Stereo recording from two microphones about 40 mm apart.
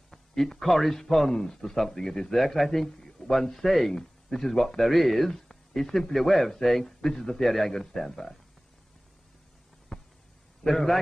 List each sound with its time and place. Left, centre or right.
0.4 s a man's voice: centre
2.3 s a man's voice: centre
7.4 s a man's voice: centre
9.9 s a sound: centre
10.6 s a man's voice: centre